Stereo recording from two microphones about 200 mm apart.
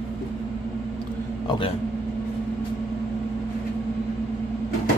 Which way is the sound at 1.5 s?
25° left (ahead or behind).